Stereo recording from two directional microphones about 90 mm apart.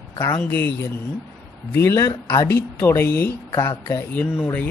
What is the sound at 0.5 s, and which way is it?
Speech, 25° left (ahead or behind).